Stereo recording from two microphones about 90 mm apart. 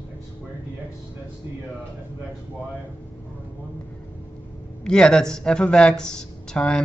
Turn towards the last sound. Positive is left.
turn(degrees=10)  # may be behind; listen again after turning